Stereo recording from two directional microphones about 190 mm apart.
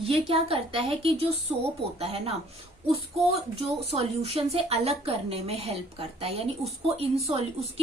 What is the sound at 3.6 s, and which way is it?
A woman's voice, 35° right (ahead or behind).